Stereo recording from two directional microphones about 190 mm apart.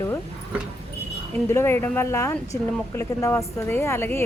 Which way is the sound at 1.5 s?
10° left (ahead or behind).